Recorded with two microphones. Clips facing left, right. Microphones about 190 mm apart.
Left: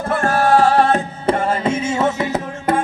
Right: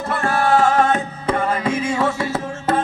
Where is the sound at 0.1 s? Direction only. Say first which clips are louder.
Left 3 dB; 45° left (ahead or behind).